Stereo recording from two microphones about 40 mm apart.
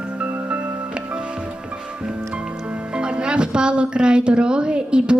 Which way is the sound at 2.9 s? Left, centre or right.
Right.